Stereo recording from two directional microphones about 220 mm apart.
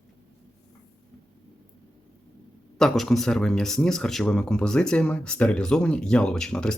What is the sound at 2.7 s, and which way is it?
Speech, centre (ahead or behind).